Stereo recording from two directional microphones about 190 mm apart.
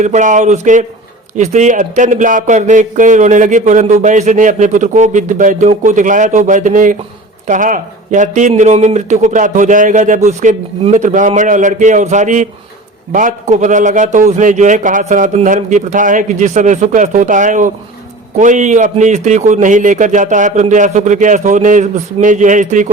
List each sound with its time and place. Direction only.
0.0 s speech: 40° right (ahead or behind)